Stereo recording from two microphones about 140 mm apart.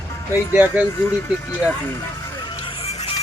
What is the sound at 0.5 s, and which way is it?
Speech, 10° right (ahead or behind).